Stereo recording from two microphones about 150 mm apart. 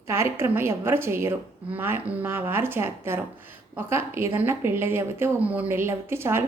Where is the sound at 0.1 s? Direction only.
15° right (ahead or behind).